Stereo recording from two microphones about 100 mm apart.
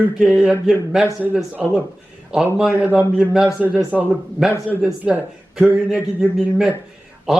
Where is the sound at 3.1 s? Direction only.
5° right (ahead or behind).